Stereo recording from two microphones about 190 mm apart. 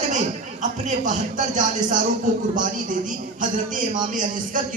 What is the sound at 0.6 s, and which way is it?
Speech, 40° right (ahead or behind).